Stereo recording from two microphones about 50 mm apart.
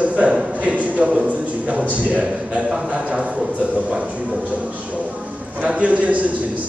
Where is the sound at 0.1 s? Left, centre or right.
Right.